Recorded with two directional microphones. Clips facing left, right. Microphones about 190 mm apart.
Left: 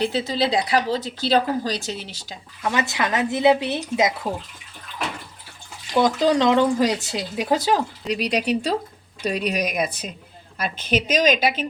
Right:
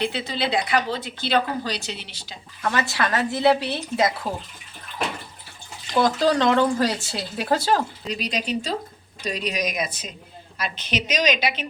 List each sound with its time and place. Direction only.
0.0 s speech: 40° left (ahead or behind)
2.6 s speech: 15° left (ahead or behind)
5.9 s speech: 20° left (ahead or behind)
8.0 s a woman's voice: 65° left (ahead or behind); by 11.6 s 45° left (ahead or behind)